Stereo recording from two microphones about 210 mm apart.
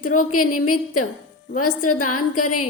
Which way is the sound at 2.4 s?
90° left.